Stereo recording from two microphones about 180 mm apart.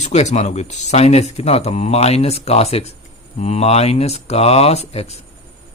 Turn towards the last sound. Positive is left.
turn(degrees=35)  # may be behind; listen again after turning